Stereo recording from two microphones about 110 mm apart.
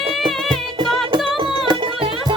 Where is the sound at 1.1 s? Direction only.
50° right (ahead or behind).